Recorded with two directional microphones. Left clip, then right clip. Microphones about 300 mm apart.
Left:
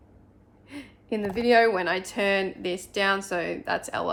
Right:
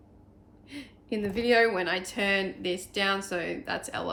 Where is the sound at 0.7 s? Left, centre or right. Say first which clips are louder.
Left 3 dB; centre.